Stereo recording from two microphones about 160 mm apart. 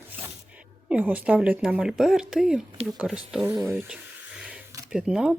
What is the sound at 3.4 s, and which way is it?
A woman's voice, 20° right (ahead or behind).